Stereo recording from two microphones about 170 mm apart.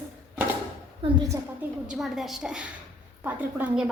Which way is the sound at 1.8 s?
Centre (ahead or behind).